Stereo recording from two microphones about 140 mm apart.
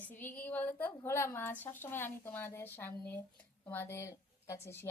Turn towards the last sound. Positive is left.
turn(degrees=15)  # may be behind; listen again after turning